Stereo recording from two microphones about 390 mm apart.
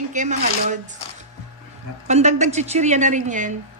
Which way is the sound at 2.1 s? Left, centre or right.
Centre.